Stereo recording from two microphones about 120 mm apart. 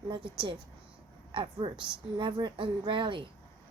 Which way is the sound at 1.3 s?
45° right (ahead or behind).